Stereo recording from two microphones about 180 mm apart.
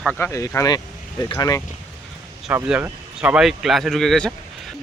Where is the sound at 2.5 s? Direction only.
5° right (ahead or behind).